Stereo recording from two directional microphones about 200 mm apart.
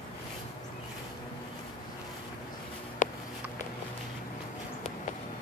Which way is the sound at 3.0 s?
40° left (ahead or behind).